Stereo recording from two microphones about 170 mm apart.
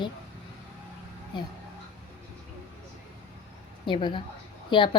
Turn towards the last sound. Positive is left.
turn(degrees=30)  # may be behind; listen again after turning